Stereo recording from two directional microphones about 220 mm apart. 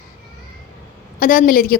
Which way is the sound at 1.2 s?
40° left (ahead or behind).